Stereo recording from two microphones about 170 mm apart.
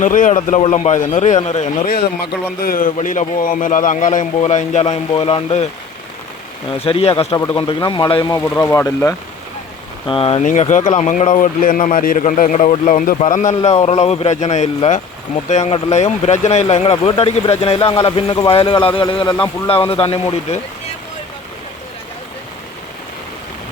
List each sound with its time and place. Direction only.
0.0 s speech: 50° left (ahead or behind)
2.6 s speech: 55° left (ahead or behind); by 5.6 s 35° left (ahead or behind)
6.8 s speech: 35° left (ahead or behind)
8.4 s speech: 10° left (ahead or behind)
10.1 s speech: 35° left (ahead or behind)
10.4 s speech: 45° left (ahead or behind)